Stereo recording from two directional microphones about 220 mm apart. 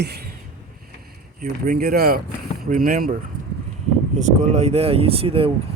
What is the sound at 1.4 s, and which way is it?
Speech, 40° right (ahead or behind).